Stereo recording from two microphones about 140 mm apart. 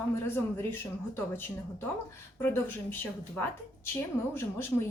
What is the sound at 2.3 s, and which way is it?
A woman's voice, 15° left (ahead or behind).